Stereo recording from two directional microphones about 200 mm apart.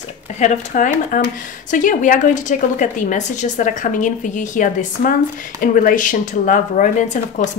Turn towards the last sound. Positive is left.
turn(degrees=40)  # may be behind; listen again after turning